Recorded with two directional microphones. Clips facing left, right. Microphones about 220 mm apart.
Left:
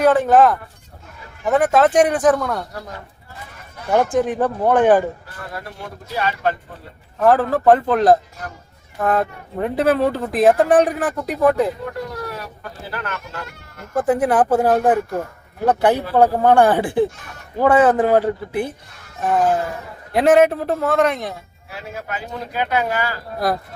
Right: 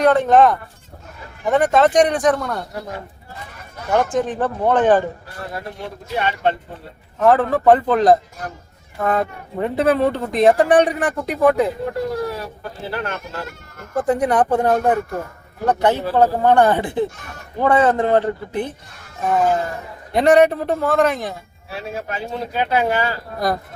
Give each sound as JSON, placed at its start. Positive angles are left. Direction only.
{"t": 0.0, "sound": "speech", "side_deg": 0}
{"t": 3.9, "sound": "speech", "side_deg": 10}
{"t": 5.5, "sound": "speech", "side_deg": -25}
{"t": 7.2, "sound": "speech", "side_deg": 0}
{"t": 12.1, "sound": "a sound", "side_deg": -30}
{"t": 12.9, "sound": "speech", "side_deg": -30}
{"t": 14.1, "sound": "speech", "side_deg": 5}
{"t": 21.7, "sound": "speech", "side_deg": -30}
{"t": 23.4, "sound": "speech", "side_deg": 0}